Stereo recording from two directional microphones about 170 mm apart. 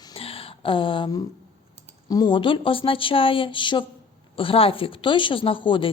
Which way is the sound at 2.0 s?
25° left (ahead or behind).